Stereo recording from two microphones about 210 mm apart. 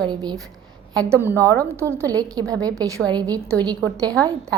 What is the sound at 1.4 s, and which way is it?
Speech, 10° left (ahead or behind).